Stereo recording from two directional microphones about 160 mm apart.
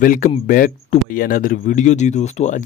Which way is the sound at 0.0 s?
55° left (ahead or behind).